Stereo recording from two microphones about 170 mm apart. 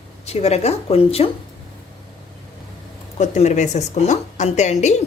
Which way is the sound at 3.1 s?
40° left (ahead or behind).